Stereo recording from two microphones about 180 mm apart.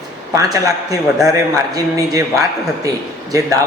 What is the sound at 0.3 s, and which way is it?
A man's voice, 20° right (ahead or behind).